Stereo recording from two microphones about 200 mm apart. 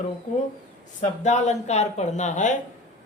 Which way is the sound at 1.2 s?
35° left (ahead or behind).